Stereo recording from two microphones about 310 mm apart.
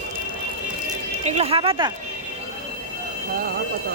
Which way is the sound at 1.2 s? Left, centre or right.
Centre.